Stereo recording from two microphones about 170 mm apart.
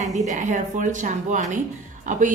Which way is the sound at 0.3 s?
45° right (ahead or behind).